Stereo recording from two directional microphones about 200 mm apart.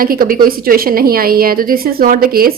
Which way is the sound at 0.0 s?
45° right (ahead or behind).